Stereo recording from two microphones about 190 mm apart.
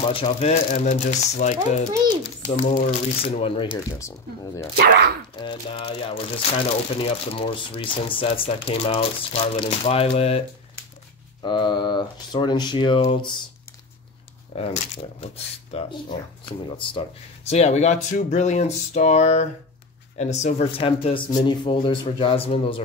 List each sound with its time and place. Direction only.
0.1 s speech: 30° left (ahead or behind)
4.7 s speech: 55° right (ahead or behind)
5.3 s speech: 25° left (ahead or behind)
11.4 s speech: 25° left (ahead or behind)
14.5 s speech: 30° left (ahead or behind)